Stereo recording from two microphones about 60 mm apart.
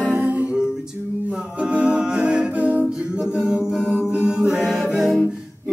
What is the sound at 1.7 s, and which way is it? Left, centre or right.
Music, centre.